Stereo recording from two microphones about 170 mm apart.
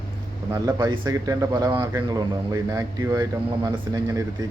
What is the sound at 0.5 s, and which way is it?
Speech, 20° right (ahead or behind).